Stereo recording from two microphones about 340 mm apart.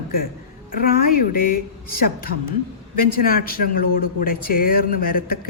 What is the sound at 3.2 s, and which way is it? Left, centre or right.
A woman's voice, left.